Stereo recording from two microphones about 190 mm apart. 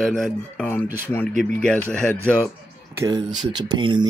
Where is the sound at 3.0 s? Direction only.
20° right (ahead or behind).